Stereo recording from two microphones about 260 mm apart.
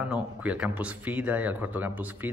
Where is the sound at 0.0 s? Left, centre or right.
Centre.